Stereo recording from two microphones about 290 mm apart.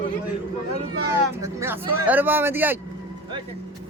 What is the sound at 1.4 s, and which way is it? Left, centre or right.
Speech, centre.